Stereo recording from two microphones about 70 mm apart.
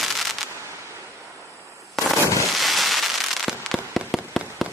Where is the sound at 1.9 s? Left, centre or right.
Centre.